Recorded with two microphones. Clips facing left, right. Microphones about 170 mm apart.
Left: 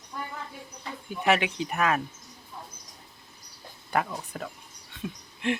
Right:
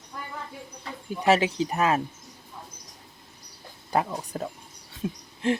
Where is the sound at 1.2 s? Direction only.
35° right (ahead or behind).